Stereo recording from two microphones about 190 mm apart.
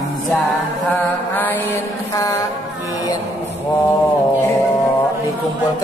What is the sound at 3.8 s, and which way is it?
Speech, 10° left (ahead or behind).